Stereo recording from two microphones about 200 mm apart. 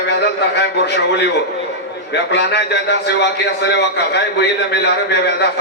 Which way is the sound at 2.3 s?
55° left (ahead or behind).